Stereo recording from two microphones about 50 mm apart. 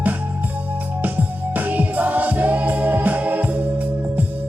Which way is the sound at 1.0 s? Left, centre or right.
Right.